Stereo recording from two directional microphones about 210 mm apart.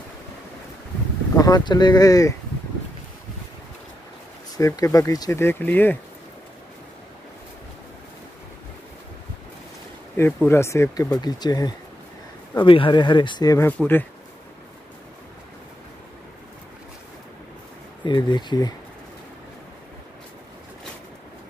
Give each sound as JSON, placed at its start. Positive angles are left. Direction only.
{"t": 1.3, "sound": "speech", "side_deg": 15}
{"t": 4.6, "sound": "speech", "side_deg": 15}
{"t": 10.1, "sound": "speech", "side_deg": 10}
{"t": 18.0, "sound": "speech", "side_deg": 20}